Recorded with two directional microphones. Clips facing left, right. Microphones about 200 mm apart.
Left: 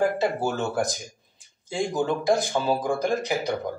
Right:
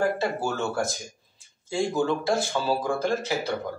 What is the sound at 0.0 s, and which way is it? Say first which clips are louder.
Speech: left 2 dB; 15° left (ahead or behind).